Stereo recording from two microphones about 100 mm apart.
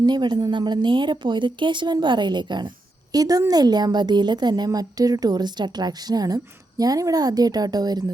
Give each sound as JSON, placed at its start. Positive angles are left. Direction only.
{"t": 0.0, "sound": "a woman's voice", "side_deg": -45}
{"t": 3.1, "sound": "a woman's voice", "side_deg": -40}